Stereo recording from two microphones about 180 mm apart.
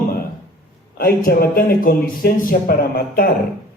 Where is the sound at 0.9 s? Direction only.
55° left (ahead or behind).